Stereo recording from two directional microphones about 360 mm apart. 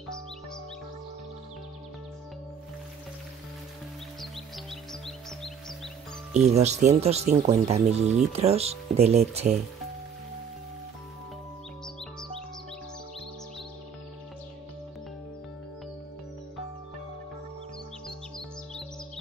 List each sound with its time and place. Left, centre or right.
4.2 s music: centre
6.4 s speech: centre